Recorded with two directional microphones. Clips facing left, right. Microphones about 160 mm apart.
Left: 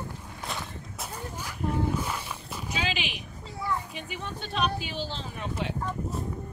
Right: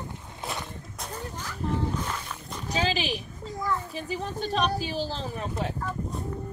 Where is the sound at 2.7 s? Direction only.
35° right (ahead or behind).